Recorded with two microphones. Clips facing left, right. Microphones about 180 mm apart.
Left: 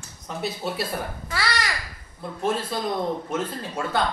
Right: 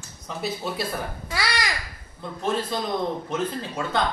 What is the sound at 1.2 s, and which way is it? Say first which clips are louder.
Babbling: even; 15° right (ahead or behind).